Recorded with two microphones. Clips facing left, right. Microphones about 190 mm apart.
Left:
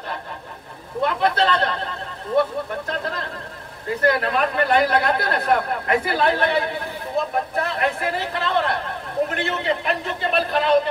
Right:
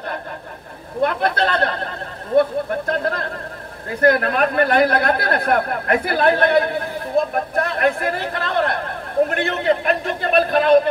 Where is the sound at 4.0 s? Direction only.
50° right (ahead or behind).